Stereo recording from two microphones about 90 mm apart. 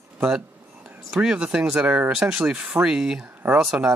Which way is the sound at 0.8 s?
5° right (ahead or behind).